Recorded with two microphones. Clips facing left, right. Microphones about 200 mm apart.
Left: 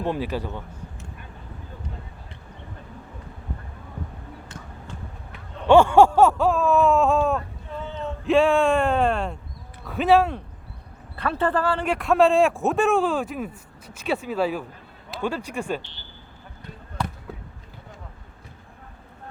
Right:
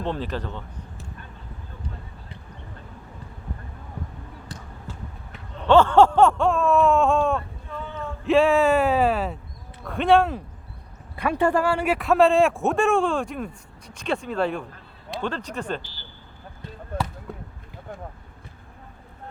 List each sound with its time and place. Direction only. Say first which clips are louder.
0.0 s speech: left 2 dB; 10° left (ahead or behind)
4.9 s basketball bounce: right 1 dB; 5° right (ahead or behind)
5.6 s a man's voice: left 1 dB; 10° left (ahead or behind)
11.2 s a man's voice: right 2 dB; 15° right (ahead or behind); by 15.8 s 10° left (ahead or behind)
16.9 s basketball bounce: right 2 dB; 55° right (ahead or behind)
17.3 s a sound: right 1 dB; centre (ahead or behind)